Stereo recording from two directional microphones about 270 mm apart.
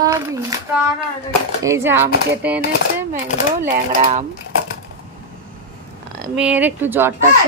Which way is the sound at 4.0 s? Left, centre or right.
Right.